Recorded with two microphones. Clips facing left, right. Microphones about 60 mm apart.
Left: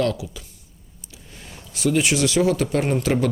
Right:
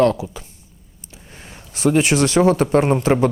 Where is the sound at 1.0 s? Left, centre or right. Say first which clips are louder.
Right 2 dB; right.